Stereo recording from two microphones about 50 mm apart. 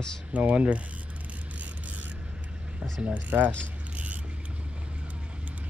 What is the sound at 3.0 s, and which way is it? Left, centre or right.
Speech, right.